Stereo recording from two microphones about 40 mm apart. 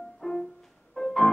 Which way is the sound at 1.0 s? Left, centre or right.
Left.